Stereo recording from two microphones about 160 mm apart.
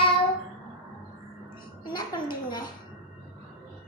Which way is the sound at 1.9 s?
30° left (ahead or behind).